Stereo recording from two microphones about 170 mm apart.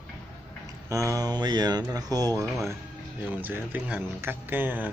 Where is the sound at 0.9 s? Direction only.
20° right (ahead or behind).